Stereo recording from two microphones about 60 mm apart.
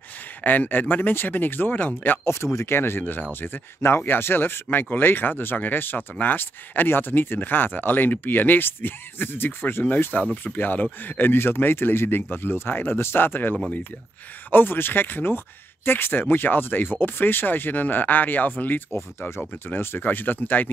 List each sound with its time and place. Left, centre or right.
0.4 s speech: left
2.2 s speech: left